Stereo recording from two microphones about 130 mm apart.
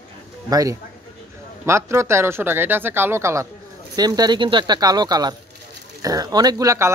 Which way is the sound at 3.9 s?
30° right (ahead or behind).